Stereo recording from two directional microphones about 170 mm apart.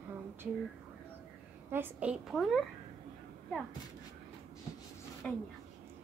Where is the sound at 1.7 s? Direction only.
10° right (ahead or behind).